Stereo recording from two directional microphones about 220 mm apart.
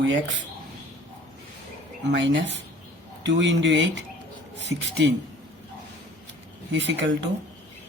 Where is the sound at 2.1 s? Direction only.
55° right (ahead or behind).